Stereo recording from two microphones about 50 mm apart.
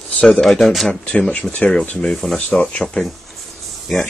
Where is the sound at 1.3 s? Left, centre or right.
Centre.